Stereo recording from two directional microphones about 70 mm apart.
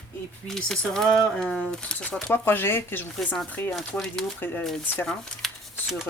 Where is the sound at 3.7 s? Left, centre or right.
Centre.